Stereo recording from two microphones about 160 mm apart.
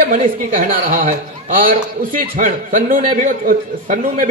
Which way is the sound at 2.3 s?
55° right (ahead or behind).